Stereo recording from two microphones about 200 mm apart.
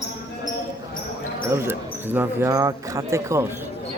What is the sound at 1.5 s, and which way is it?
Speech, 10° right (ahead or behind).